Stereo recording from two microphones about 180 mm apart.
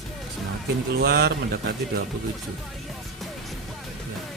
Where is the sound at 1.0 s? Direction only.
65° right (ahead or behind).